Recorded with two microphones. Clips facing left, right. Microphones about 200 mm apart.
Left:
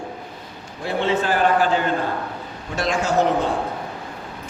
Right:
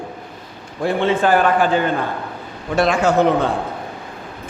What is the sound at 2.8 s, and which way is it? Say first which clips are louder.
Speech: right 5 dB; 60° right (ahead or behind).